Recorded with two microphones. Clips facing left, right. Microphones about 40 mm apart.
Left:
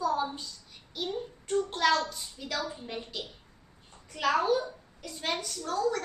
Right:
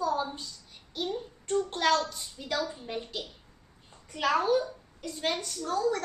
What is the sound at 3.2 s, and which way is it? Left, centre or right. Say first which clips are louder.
Speech: even; left.